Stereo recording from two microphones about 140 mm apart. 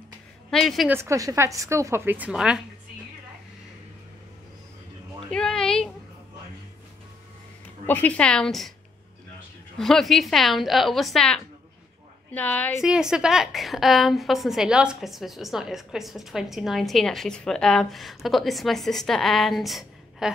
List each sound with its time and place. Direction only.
0.5 s a woman's voice: centre (ahead or behind)
0.8 s a woman's voice: 20° right (ahead or behind)
5.3 s a sound: 5° left (ahead or behind)
7.8 s a woman's voice: 10° left (ahead or behind)
9.8 s a woman's voice: 5° left (ahead or behind)
12.8 s a woman's voice: 5° right (ahead or behind)